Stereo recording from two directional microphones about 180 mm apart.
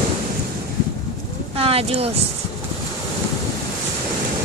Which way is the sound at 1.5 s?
30° right (ahead or behind).